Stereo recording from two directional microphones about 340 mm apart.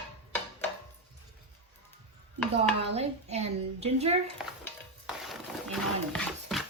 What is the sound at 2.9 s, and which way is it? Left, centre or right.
Speech, centre.